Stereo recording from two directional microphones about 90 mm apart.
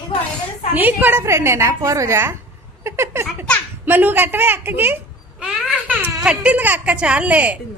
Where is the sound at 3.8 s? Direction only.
20° right (ahead or behind).